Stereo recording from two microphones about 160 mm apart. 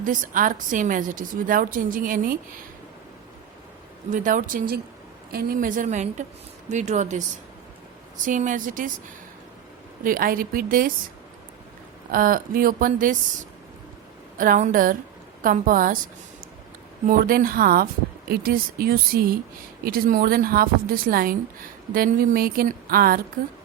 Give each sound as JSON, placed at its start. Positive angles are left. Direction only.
{"t": 0.0, "sound": "a woman's voice", "side_deg": -55}
{"t": 4.1, "sound": "a woman's voice", "side_deg": -55}
{"t": 8.2, "sound": "a woman's voice", "side_deg": -55}
{"t": 10.0, "sound": "a woman's voice", "side_deg": -60}
{"t": 12.1, "sound": "a woman's voice", "side_deg": -60}
{"t": 14.3, "sound": "a woman's voice", "side_deg": -55}
{"t": 17.1, "sound": "a woman's voice", "side_deg": -65}